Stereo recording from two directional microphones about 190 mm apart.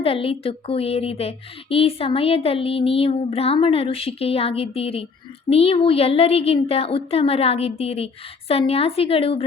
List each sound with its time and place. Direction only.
0.0 s speech: 30° left (ahead or behind)